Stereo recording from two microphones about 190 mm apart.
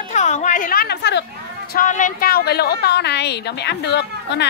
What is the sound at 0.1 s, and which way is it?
A woman's voice, 40° left (ahead or behind).